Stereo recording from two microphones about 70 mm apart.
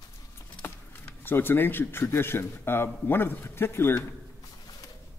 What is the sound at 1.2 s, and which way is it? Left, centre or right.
A man's voice, left.